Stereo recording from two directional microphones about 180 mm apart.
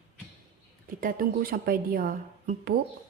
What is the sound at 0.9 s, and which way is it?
A woman's voice, 50° right (ahead or behind).